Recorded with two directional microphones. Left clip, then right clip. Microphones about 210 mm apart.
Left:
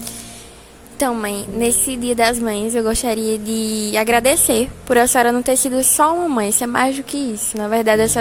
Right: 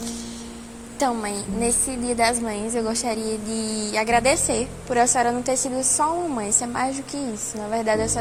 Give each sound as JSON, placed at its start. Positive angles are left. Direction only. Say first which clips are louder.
{"t": 0.9, "sound": "a woman's voice", "louder": "left 4 dB", "side_deg": 35}
{"t": 3.7, "sound": "speech", "louder": "left 5 dB", "side_deg": 70}
{"t": 3.9, "sound": "a woman's voice", "louder": "left 4 dB", "side_deg": 45}
{"t": 7.1, "sound": "a woman's voice", "louder": "left 6 dB", "side_deg": 90}
{"t": 7.6, "sound": "a woman's voice", "louder": "left 8 dB", "side_deg": 50}